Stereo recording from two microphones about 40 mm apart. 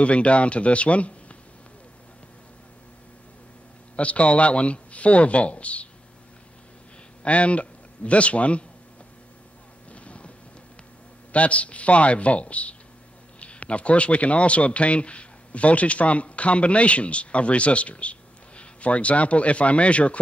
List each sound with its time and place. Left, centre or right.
0.0 s speech: left
3.9 s speech: left
7.2 s a man's voice: left
9.8 s a sound: left
11.3 s speech: left